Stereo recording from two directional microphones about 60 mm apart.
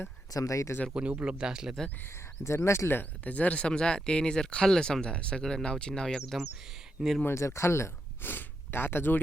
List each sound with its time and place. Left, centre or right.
0.3 s speech: left
0.9 s speech: centre
2.6 s speech: left; by 6.4 s centre
7.3 s speech: left